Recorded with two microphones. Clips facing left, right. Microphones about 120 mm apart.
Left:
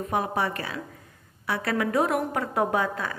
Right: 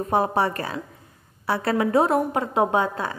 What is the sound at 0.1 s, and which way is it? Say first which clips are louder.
A woman's voice: right 5 dB; 35° right (ahead or behind).